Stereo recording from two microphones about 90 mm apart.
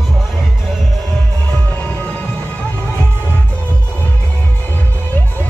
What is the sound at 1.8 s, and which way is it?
Music, 15° left (ahead or behind).